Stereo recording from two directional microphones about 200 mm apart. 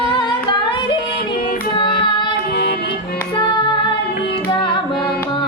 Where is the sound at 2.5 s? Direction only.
55° left (ahead or behind).